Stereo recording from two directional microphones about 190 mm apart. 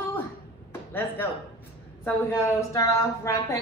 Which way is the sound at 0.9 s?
10° left (ahead or behind).